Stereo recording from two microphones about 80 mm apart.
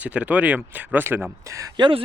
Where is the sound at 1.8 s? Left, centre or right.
Right.